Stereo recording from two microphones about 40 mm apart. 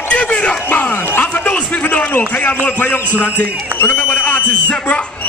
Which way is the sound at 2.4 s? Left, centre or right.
Left.